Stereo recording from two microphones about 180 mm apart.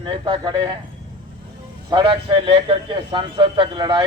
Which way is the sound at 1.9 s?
25° right (ahead or behind).